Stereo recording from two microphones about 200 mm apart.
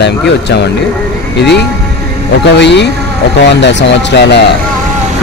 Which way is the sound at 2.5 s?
60° left (ahead or behind).